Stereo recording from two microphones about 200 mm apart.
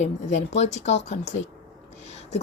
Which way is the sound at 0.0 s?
35° left (ahead or behind).